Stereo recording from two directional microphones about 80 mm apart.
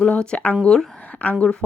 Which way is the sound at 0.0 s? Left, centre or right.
Centre.